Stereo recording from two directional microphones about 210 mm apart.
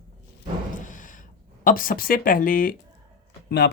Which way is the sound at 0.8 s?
40° left (ahead or behind).